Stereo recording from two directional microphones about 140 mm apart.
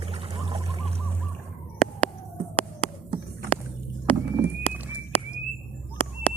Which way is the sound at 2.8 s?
45° left (ahead or behind).